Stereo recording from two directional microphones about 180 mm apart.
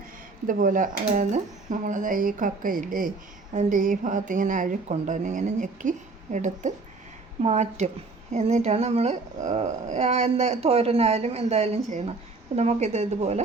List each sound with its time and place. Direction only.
0.4 s speech: 50° right (ahead or behind)